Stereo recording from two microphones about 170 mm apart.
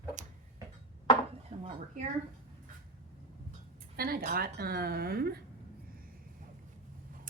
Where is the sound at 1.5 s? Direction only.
50° right (ahead or behind).